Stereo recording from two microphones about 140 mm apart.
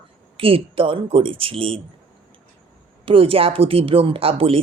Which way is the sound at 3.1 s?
40° right (ahead or behind).